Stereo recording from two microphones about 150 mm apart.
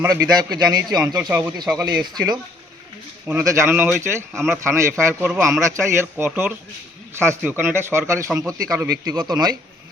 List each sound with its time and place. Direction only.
0.0 s a man's voice: 25° right (ahead or behind)
1.3 s a man's voice: 15° right (ahead or behind)
1.7 s a man's voice: 25° right (ahead or behind)
3.2 s a man's voice: 15° right (ahead or behind)